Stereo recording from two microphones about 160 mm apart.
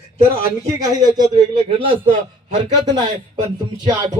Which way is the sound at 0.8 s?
25° right (ahead or behind).